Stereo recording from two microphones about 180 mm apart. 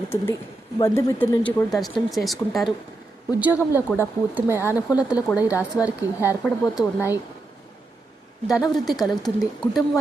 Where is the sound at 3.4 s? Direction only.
10° right (ahead or behind).